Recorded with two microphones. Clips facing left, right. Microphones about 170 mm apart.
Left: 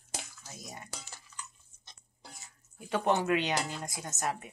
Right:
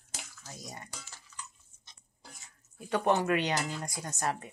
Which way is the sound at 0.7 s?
20° left (ahead or behind).